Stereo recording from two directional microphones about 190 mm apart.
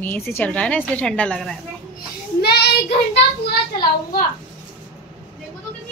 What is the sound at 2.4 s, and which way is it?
Child singing, 60° left (ahead or behind).